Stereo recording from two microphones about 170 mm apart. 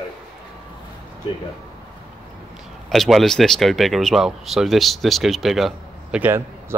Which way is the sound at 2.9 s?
Centre (ahead or behind).